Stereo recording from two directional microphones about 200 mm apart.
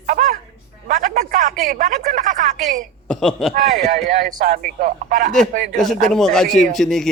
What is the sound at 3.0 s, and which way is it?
Speech, 5° left (ahead or behind).